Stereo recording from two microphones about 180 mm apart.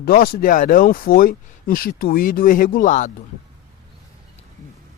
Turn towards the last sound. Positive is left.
turn(degrees=45)  # may be behind; listen again after turning